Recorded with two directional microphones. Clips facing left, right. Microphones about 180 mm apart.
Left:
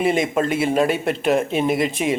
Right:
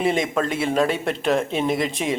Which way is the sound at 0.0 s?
5° left (ahead or behind).